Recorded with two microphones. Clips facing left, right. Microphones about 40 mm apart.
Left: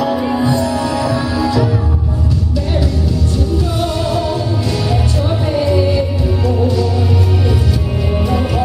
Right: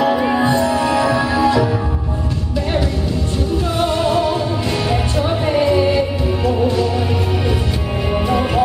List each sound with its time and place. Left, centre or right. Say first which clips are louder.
0.0 s music: right 1 dB; centre
3.7 s music: right 1 dB; right
8.1 s music: right 1 dB; right